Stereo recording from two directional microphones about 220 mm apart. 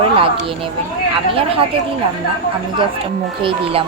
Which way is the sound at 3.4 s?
25° right (ahead or behind).